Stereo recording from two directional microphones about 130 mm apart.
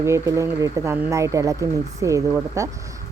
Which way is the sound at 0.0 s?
20° right (ahead or behind).